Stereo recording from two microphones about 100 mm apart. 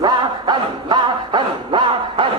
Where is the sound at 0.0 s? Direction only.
50° right (ahead or behind).